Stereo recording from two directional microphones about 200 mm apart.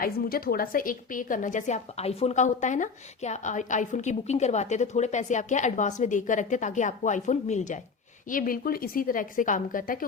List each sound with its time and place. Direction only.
0.0 s a woman's voice: 50° left (ahead or behind)